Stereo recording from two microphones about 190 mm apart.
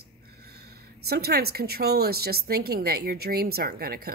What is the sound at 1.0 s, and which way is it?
Speech, 55° right (ahead or behind).